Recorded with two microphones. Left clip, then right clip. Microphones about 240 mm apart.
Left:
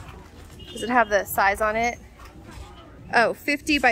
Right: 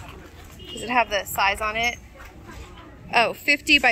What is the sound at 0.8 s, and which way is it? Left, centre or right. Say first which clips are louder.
A woman's voice: left 2 dB; left.